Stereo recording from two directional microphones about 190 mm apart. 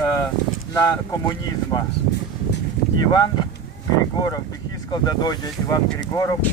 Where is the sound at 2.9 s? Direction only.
20° left (ahead or behind).